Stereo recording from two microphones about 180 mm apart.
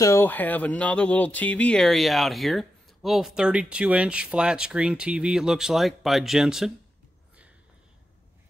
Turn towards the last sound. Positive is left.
turn(degrees=-5)  # may be behind; listen again after turning